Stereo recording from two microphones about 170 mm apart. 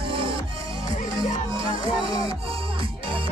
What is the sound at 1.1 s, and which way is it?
Music, 20° left (ahead or behind).